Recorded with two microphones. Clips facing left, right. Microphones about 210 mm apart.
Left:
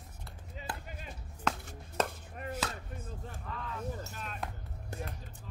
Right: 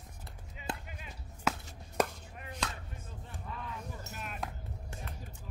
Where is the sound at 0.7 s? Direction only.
20° right (ahead or behind).